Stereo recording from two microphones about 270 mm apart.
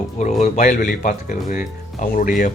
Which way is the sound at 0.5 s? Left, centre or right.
Left.